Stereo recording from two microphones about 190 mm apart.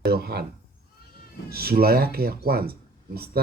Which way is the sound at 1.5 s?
55° right (ahead or behind).